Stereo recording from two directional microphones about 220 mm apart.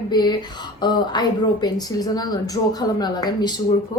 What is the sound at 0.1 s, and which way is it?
Speech, 20° left (ahead or behind).